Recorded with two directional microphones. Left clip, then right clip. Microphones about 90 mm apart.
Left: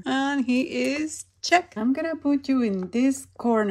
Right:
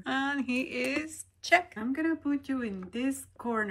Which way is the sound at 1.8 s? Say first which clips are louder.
Left 5 dB; 40° left (ahead or behind).